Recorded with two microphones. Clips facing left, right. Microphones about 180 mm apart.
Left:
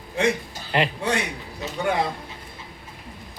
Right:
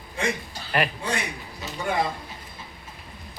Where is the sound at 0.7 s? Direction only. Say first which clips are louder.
Left 2 dB; 20° left (ahead or behind).